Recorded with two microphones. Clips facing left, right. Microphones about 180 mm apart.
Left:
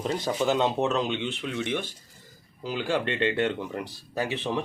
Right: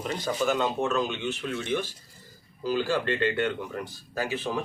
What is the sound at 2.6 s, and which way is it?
Speech, 15° left (ahead or behind).